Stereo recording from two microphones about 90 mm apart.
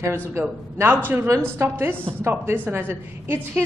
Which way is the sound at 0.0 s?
30° right (ahead or behind).